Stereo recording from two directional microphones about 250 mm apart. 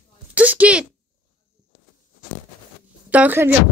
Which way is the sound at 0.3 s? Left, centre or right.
Centre.